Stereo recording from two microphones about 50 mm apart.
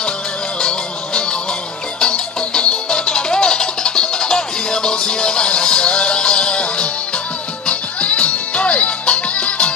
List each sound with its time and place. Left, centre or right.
0.6 s music: centre